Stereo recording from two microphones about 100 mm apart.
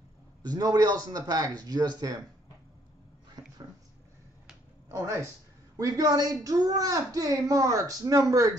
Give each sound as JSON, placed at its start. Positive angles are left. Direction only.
{"t": 0.5, "sound": "speech", "side_deg": -40}
{"t": 3.4, "sound": "a sound", "side_deg": -40}
{"t": 4.8, "sound": "speech", "side_deg": -30}